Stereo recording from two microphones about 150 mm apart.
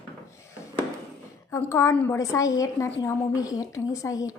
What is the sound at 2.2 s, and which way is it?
A woman's voice, 20° left (ahead or behind).